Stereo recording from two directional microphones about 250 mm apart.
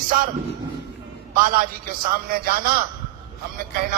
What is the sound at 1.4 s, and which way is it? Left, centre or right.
Speech, right.